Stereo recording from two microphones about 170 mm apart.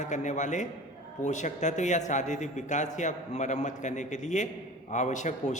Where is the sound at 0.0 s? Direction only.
45° left (ahead or behind).